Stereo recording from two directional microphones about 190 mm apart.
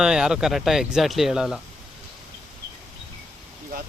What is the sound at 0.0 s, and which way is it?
Speech, 5° right (ahead or behind).